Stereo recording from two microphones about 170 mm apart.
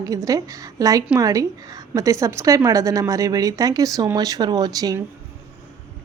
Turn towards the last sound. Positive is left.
turn(degrees=-20)  # may be behind; listen again after turning